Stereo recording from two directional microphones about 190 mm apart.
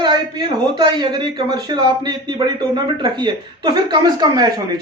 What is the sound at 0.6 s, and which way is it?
A man's voice, 25° right (ahead or behind).